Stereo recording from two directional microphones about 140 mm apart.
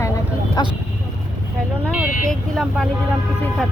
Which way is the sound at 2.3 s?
Centre (ahead or behind).